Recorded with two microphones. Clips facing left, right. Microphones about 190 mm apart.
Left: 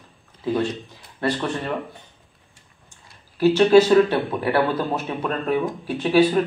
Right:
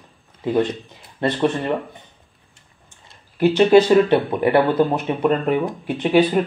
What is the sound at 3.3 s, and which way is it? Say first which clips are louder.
Speech: right 1 dB; 20° right (ahead or behind).